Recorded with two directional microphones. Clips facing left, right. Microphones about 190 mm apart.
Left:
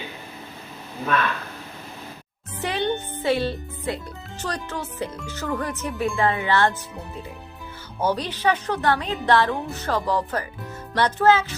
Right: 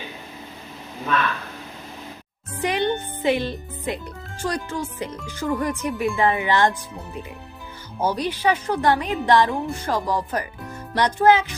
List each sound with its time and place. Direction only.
2.6 s a child's voice: 15° right (ahead or behind)
8.0 s a woman's voice: 10° right (ahead or behind)